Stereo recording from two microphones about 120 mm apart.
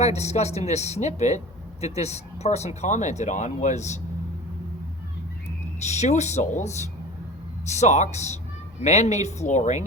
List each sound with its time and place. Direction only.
0.0 s speech: 65° left (ahead or behind)
5.8 s speech: 70° left (ahead or behind)